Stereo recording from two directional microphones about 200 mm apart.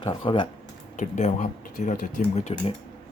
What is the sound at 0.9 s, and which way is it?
Speech, 35° left (ahead or behind).